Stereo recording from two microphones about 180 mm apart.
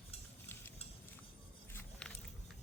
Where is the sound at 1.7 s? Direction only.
10° left (ahead or behind).